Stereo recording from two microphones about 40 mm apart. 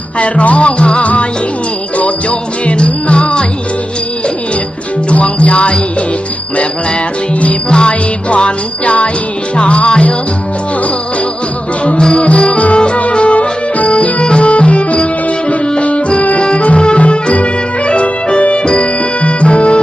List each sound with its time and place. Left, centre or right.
0.2 s music: left
2.6 s music: left
5.1 s music: left
7.7 s music: left
12.1 s music: left